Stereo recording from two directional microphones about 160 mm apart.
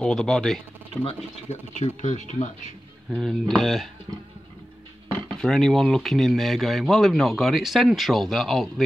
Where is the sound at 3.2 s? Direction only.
Centre (ahead or behind).